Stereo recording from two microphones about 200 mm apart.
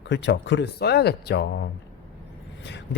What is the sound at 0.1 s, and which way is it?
Speech, 60° left (ahead or behind).